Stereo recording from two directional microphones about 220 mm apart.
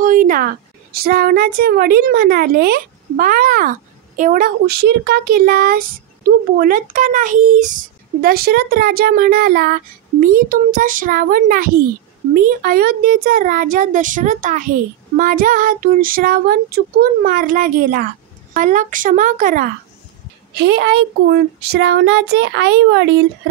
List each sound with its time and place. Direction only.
0.0 s a sound: 40° right (ahead or behind)
0.9 s a woman's voice: 45° right (ahead or behind)
20.5 s a woman's voice: 50° right (ahead or behind)